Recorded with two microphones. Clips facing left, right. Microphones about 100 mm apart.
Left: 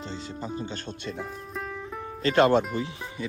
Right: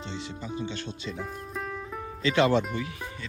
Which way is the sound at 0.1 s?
40° left (ahead or behind).